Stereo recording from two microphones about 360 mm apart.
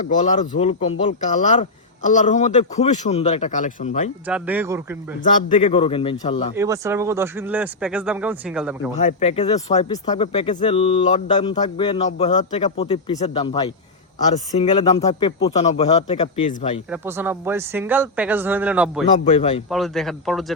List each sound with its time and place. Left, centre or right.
0.0 s speech: left
4.3 s speech: centre
5.2 s speech: left
6.6 s speech: centre
9.0 s speech: centre
16.9 s speech: centre
19.2 s speech: centre
19.7 s speech: centre